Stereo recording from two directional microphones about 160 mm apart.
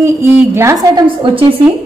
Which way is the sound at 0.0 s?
15° right (ahead or behind).